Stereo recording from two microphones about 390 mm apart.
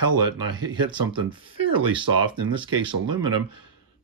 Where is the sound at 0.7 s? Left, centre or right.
Centre.